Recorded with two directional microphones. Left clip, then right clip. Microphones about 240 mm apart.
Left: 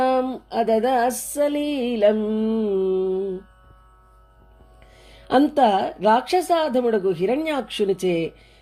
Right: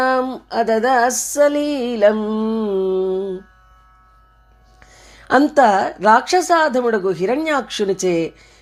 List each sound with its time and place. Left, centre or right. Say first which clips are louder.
0.0 s music: right 3 dB; centre
5.0 s music: right 4 dB; centre